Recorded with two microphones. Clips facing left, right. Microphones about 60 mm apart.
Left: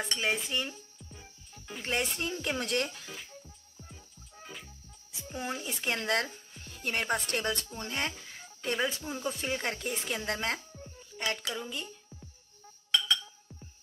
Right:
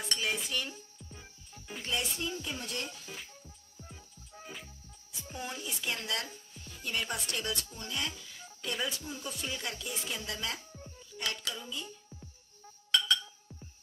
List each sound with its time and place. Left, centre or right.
0.1 s dishes: left
1.9 s speech: left
5.1 s music: left
5.7 s speech: left
11.5 s speech: left